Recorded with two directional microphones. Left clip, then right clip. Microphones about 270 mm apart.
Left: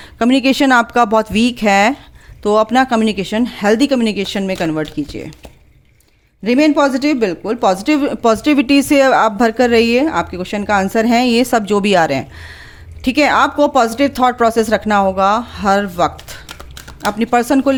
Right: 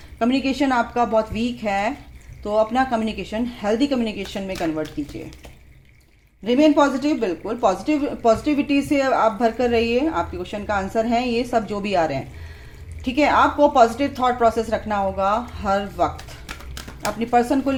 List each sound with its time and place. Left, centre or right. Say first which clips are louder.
0.2 s speech: left 8 dB; left
6.4 s speech: left 4 dB; left